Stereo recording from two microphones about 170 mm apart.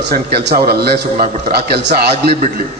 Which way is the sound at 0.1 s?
65° right (ahead or behind).